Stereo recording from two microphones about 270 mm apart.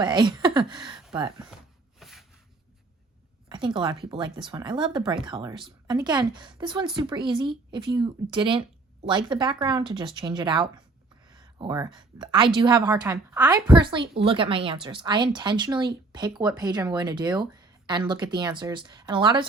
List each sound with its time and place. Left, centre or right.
0.0 s speech: centre
2.0 s a sound: centre
3.5 s speech: centre